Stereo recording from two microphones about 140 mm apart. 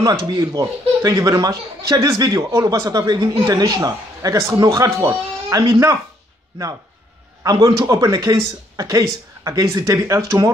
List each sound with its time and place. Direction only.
0.0 s speech: 30° right (ahead or behind)
7.4 s speech: 30° right (ahead or behind)